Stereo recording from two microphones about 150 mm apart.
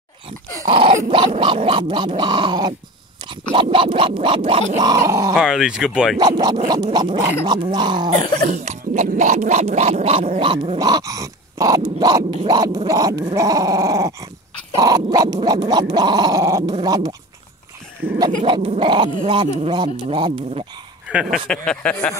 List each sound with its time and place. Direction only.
0.7 s dog: 35° right (ahead or behind)
1.1 s a sound: 35° right (ahead or behind)
4.8 s speech: 20° right (ahead or behind)
5.3 s speech: 5° right (ahead or behind)
6.1 s speech: 30° right (ahead or behind)
8.5 s speech: 50° right (ahead or behind); by 17.1 s 25° right (ahead or behind)
18.0 s dog: 10° right (ahead or behind)
18.5 s a sound: 35° right (ahead or behind)
21.1 s speech: 5° right (ahead or behind)
21.5 s speech: 5° left (ahead or behind)